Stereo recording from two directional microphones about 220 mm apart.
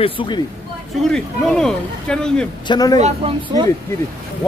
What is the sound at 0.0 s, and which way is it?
Speech, 25° left (ahead or behind).